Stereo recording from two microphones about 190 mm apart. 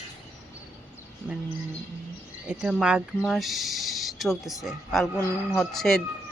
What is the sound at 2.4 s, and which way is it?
Speech, 5° right (ahead or behind).